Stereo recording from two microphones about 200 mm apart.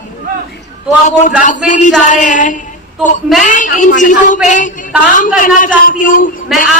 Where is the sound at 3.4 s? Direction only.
40° left (ahead or behind).